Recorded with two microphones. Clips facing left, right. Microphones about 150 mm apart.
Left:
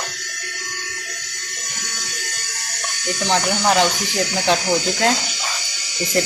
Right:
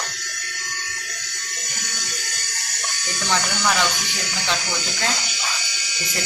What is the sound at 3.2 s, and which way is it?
Speech, 35° left (ahead or behind).